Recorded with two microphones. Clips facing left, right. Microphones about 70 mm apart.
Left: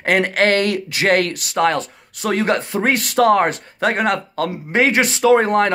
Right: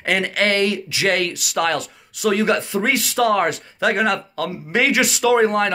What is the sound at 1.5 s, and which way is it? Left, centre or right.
Speech, left.